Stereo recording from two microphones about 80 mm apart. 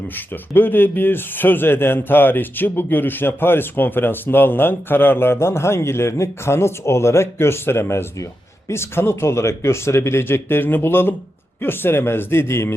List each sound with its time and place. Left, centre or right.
0.5 s speech: left